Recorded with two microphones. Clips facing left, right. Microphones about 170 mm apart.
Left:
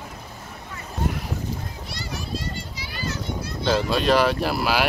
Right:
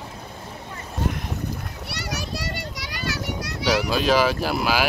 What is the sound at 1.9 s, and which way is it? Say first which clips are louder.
Children playing: right 1 dB; 75° right (ahead or behind).